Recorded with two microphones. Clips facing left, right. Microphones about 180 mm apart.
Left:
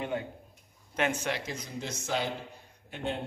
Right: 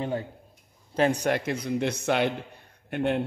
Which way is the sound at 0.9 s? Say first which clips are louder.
Right 7 dB; 35° right (ahead or behind).